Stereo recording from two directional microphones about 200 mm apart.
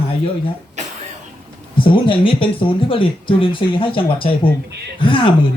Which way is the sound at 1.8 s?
25° left (ahead or behind).